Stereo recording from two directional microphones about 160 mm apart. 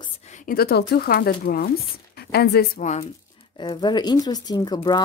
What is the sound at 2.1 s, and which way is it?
Speech, 90° left.